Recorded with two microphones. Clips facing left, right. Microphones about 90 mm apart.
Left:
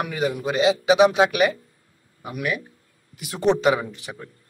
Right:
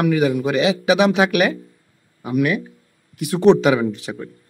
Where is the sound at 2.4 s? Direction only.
60° right (ahead or behind); by 4.1 s 90° right.